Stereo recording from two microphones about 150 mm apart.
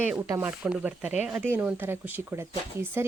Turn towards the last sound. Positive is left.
turn(degrees=-15)  # may be behind; listen again after turning